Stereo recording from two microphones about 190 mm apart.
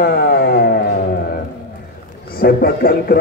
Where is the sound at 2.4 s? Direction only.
55° left (ahead or behind).